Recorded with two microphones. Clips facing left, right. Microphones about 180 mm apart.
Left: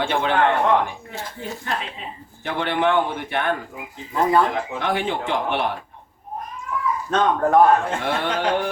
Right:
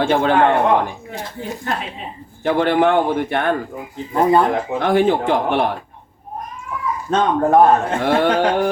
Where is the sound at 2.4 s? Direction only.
45° right (ahead or behind).